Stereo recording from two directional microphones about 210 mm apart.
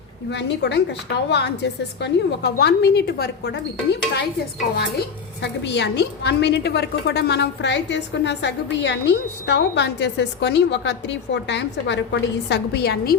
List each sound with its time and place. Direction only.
0.3 s a woman's voice: 55° left (ahead or behind)
5.4 s a woman's voice: 55° left (ahead or behind)